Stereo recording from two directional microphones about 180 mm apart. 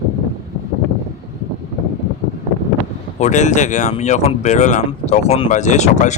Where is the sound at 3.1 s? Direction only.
40° left (ahead or behind).